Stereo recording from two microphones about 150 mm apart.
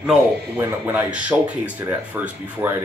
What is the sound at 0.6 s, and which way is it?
Speech, 15° right (ahead or behind).